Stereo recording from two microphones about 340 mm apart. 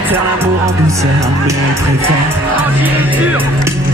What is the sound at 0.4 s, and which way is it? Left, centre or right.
Speech, centre.